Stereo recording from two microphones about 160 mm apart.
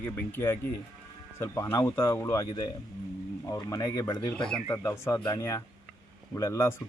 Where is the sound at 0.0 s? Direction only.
15° left (ahead or behind).